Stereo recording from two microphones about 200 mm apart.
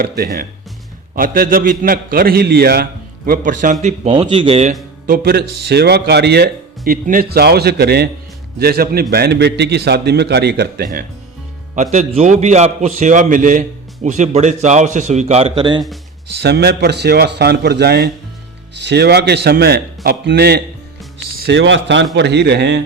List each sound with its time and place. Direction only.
0.0 s a man's voice: 45° right (ahead or behind); by 4.7 s 30° right (ahead or behind)
5.0 s speech: 45° right (ahead or behind)
11.7 s a man's voice: 35° right (ahead or behind)
16.3 s a man's voice: 55° right (ahead or behind)